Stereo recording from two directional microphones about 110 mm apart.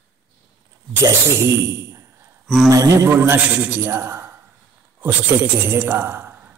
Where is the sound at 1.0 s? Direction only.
25° right (ahead or behind).